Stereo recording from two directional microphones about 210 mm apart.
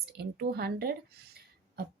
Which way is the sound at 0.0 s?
50° right (ahead or behind).